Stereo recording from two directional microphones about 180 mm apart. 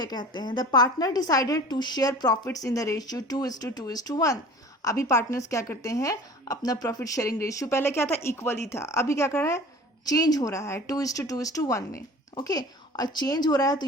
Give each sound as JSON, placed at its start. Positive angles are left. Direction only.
{"t": 0.0, "sound": "a woman's voice", "side_deg": 25}